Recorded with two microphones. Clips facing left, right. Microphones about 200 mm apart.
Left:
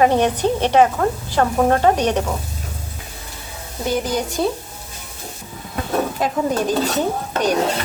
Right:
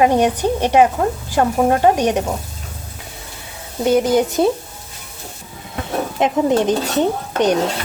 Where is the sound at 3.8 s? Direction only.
25° right (ahead or behind).